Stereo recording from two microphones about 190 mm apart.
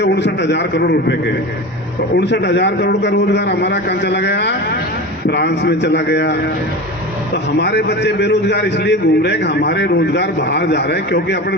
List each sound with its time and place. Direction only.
0.0 s a man's voice: 65° left (ahead or behind)
2.1 s a man's voice: 60° left (ahead or behind)
7.6 s a man's voice: 60° left (ahead or behind)